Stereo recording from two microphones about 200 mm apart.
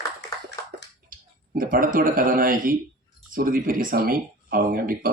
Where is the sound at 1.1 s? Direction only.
45° right (ahead or behind).